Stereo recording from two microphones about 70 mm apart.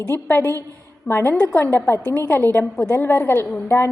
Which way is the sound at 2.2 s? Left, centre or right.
Left.